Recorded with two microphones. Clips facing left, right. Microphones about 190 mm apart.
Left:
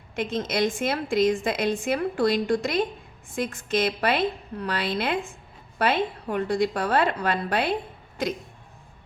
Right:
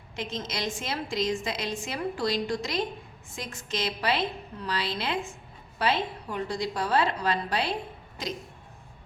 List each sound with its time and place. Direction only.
0.2 s a woman's voice: 55° left (ahead or behind)